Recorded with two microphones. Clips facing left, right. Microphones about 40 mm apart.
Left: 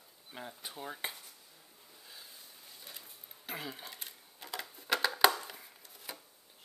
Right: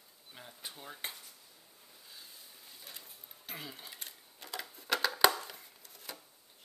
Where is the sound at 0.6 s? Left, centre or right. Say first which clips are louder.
Left 2 dB; centre.